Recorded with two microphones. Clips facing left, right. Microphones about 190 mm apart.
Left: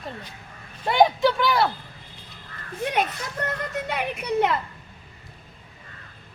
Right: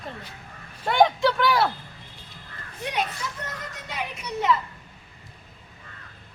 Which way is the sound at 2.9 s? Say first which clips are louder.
Left 3 dB; 55° left (ahead or behind).